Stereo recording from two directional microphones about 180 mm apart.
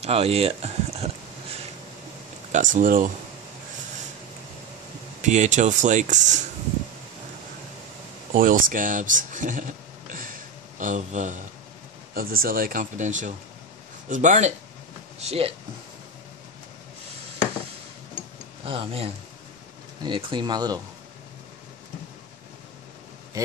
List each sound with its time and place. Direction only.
0.0 s a sound: 35° right (ahead or behind)
2.5 s speech: 45° right (ahead or behind)
5.2 s speech: 40° right (ahead or behind)
8.3 s speech: 50° right (ahead or behind)
18.7 s speech: 30° right (ahead or behind)